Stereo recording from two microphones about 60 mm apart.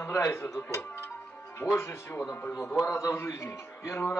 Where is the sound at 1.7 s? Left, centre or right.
Left.